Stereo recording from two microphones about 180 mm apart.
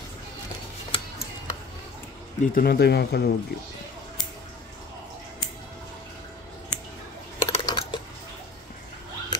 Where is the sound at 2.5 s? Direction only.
55° left (ahead or behind).